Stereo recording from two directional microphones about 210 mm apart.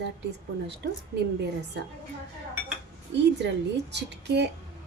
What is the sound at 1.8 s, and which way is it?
Speech, 50° right (ahead or behind).